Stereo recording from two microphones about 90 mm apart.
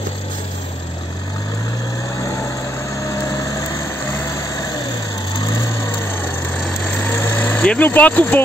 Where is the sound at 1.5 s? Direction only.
45° left (ahead or behind); by 6.6 s 25° left (ahead or behind).